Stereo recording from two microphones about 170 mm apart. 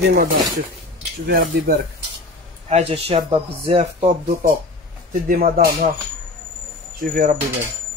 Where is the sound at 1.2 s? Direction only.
60° right (ahead or behind).